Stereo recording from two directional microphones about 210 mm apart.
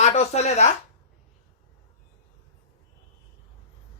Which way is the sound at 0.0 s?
30° left (ahead or behind).